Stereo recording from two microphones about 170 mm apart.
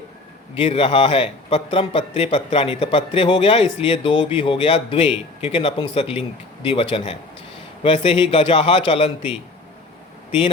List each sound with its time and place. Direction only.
0.5 s a man's voice: 35° left (ahead or behind)